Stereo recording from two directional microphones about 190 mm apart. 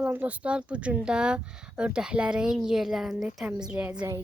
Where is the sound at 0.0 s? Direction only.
10° right (ahead or behind).